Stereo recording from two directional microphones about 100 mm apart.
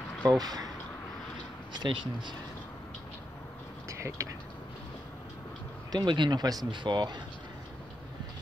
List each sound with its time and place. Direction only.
0.2 s speech: 40° right (ahead or behind)
1.7 s speech: 50° right (ahead or behind)
3.9 s speech: 30° right (ahead or behind)
5.9 s speech: 50° right (ahead or behind)